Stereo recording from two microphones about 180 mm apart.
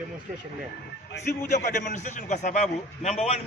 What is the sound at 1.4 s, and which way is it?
A man's voice, 45° left (ahead or behind).